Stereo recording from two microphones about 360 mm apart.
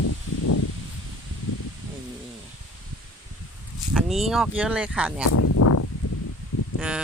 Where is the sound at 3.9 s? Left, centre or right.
Centre.